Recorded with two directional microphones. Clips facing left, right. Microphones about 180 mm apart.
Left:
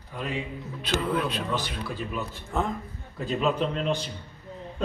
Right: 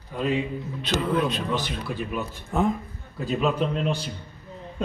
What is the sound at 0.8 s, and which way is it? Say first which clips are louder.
Speech: right 3 dB; 5° left (ahead or behind).